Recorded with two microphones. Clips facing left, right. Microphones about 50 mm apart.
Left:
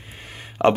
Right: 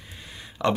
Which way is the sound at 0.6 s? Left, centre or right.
Left.